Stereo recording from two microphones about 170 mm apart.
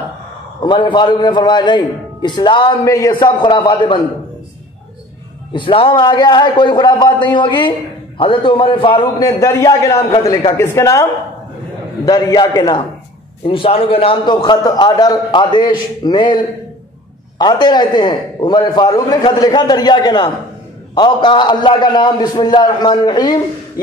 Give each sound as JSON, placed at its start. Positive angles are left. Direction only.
{"t": 0.6, "sound": "a man's voice", "side_deg": 25}
{"t": 5.5, "sound": "a man's voice", "side_deg": 30}
{"t": 9.2, "sound": "a man's voice", "side_deg": 15}
{"t": 12.1, "sound": "a man's voice", "side_deg": 20}